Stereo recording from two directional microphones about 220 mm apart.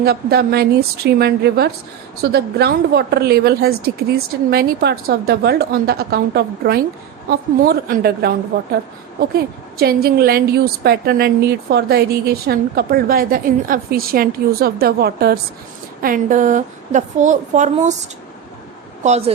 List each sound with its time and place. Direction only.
0.0 s a woman's voice: 45° right (ahead or behind)
19.0 s a woman's voice: 30° right (ahead or behind)